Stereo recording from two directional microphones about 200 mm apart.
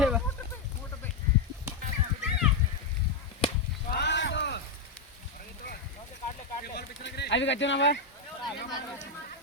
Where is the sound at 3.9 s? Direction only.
55° left (ahead or behind).